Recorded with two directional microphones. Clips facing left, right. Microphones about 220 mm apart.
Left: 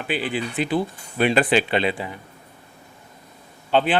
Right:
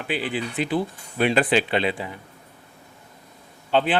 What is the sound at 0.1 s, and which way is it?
A man's voice, 10° left (ahead or behind).